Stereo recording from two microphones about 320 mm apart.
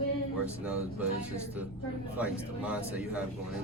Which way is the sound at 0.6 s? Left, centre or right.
Centre.